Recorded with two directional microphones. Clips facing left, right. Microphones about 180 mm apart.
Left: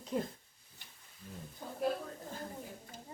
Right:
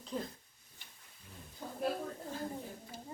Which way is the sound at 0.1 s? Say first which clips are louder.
Left 4 dB; 10° left (ahead or behind).